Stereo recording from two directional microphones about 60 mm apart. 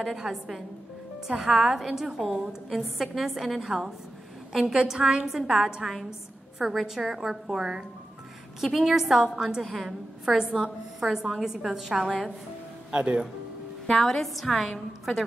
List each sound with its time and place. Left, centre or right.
0.0 s a woman's voice: centre
9.6 s a woman's voice: centre
13.9 s a woman's voice: centre